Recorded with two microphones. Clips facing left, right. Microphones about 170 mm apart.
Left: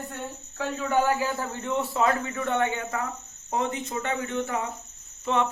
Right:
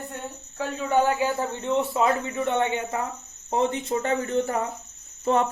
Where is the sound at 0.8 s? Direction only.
25° right (ahead or behind); by 4.6 s 40° right (ahead or behind).